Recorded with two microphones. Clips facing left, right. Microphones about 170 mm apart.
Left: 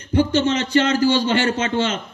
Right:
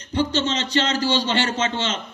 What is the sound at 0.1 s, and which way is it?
A man's voice, 50° left (ahead or behind).